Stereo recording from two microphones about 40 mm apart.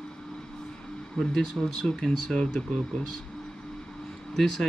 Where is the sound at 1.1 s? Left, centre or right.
Centre.